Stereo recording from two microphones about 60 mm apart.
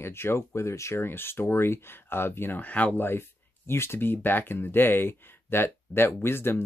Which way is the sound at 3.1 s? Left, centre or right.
Left.